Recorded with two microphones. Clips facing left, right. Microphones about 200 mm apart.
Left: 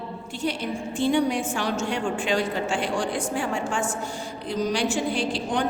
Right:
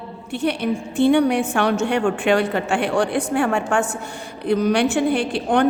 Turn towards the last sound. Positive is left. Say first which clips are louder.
# right 6 dB
turn(degrees=-60)  # may be behind; listen again after turning